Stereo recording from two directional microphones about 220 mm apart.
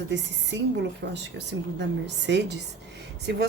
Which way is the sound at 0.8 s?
50° right (ahead or behind).